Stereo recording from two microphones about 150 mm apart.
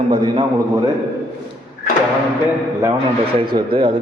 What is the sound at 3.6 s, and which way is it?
Speech, 35° right (ahead or behind).